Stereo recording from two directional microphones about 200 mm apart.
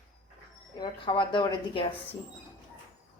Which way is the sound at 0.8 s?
25° left (ahead or behind).